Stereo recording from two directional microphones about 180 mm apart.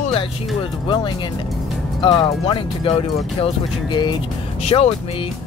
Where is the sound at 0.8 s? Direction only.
25° left (ahead or behind).